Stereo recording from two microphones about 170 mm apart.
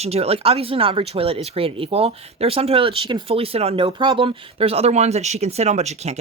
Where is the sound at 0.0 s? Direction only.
35° right (ahead or behind).